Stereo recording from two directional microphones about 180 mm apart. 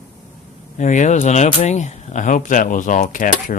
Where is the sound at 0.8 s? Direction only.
40° left (ahead or behind).